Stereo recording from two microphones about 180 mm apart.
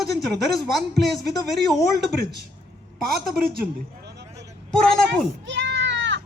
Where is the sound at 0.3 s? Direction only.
Centre (ahead or behind).